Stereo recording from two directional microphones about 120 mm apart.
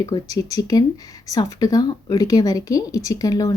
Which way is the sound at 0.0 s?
30° left (ahead or behind).